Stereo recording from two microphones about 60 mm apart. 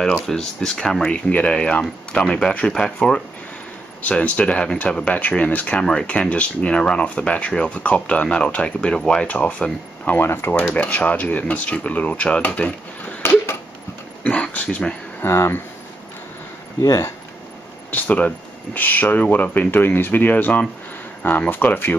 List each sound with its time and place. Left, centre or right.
0.0 s speech: centre
4.0 s speech: left
10.2 s speech: left
10.7 s speech: left
13.2 s a sound: left
14.2 s a sound: left
15.2 s speech: left
17.9 s speech: left